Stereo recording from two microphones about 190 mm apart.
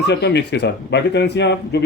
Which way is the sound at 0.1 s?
65° left (ahead or behind).